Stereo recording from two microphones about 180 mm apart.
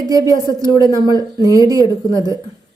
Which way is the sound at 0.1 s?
20° right (ahead or behind).